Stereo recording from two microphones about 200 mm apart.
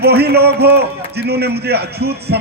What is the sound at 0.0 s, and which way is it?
A man's voice, 55° right (ahead or behind).